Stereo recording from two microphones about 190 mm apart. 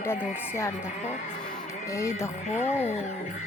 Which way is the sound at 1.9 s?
15° left (ahead or behind).